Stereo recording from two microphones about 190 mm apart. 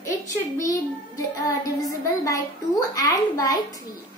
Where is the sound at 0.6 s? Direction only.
15° left (ahead or behind).